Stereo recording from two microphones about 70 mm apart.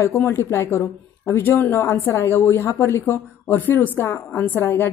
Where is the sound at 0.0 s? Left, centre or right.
Left.